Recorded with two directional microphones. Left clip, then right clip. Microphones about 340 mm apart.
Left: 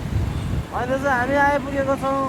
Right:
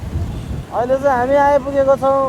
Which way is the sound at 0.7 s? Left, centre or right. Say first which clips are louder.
Right 6 dB; right.